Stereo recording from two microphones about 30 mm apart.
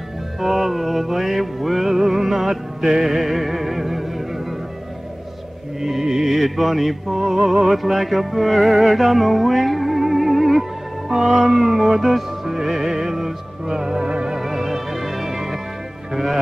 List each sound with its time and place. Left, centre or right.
0.4 s music: centre
5.8 s music: centre
6.3 s mantra: centre
7.2 s music: centre
14.0 s music: right
14.4 s music: centre